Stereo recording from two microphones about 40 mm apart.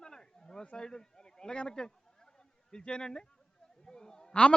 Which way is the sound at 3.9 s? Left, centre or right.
Centre.